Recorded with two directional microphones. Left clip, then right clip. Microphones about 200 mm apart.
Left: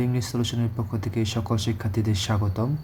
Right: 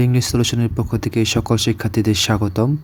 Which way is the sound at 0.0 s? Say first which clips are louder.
Right 9 dB; 40° right (ahead or behind).